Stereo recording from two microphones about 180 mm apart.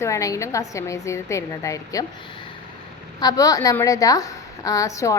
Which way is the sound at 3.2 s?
20° left (ahead or behind).